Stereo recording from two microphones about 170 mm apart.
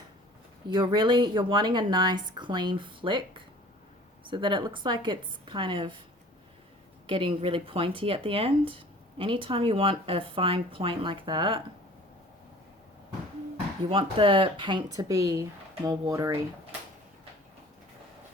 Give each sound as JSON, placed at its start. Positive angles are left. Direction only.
{"t": 0.7, "sound": "speech", "side_deg": -25}
{"t": 7.1, "sound": "speech", "side_deg": -30}
{"t": 13.9, "sound": "speech", "side_deg": -30}